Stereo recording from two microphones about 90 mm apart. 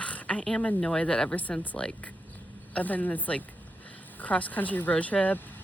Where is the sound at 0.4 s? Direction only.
5° left (ahead or behind).